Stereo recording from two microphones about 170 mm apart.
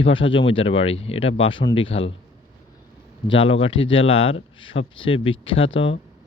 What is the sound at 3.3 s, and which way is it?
Speech, 35° left (ahead or behind).